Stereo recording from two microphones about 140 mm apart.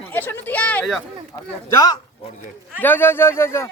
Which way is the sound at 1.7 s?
25° left (ahead or behind).